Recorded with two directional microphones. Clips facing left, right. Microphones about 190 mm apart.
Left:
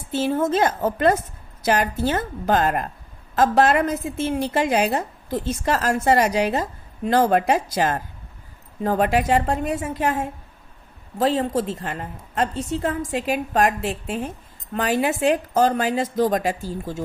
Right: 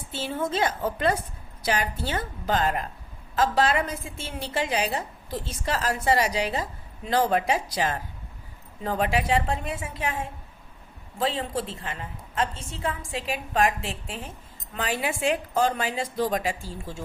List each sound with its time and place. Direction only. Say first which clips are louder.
0.1 s a woman's voice: left 8 dB; 45° left (ahead or behind)